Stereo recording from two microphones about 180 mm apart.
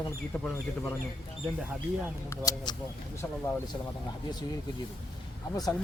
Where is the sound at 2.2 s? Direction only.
20° left (ahead or behind).